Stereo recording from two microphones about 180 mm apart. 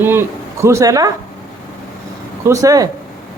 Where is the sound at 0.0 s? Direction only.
15° right (ahead or behind).